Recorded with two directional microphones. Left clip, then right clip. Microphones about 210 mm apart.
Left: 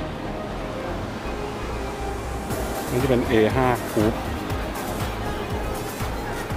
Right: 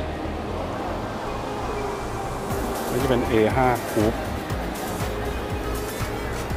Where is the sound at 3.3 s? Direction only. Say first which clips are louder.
Even; 15° left (ahead or behind).